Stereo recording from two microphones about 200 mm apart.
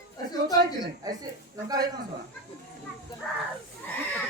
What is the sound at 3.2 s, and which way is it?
Speech, 5° left (ahead or behind).